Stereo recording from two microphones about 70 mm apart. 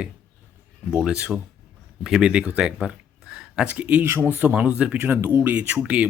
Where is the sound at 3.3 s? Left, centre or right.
Centre.